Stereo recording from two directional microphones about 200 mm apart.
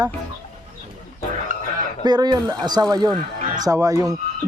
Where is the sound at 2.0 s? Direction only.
20° right (ahead or behind).